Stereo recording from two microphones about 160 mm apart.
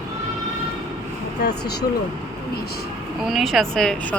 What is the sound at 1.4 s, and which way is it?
Speech, 90° left.